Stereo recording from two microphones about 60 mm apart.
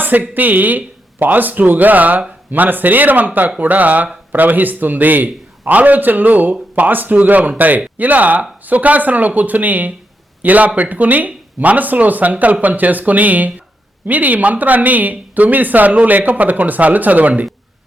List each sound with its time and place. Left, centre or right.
0.0 s a man's voice: right